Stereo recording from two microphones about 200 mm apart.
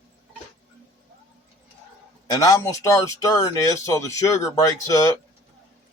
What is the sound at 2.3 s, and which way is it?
Speech, 15° left (ahead or behind).